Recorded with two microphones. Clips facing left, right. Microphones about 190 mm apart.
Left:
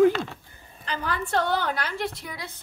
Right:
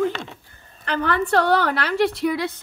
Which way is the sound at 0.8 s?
65° right (ahead or behind).